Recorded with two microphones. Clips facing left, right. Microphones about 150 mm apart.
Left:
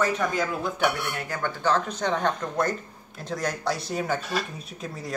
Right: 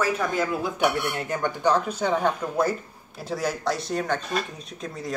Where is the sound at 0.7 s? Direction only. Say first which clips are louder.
Right 3 dB; 15° right (ahead or behind).